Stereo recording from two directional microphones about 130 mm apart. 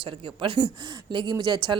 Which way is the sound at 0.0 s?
40° right (ahead or behind).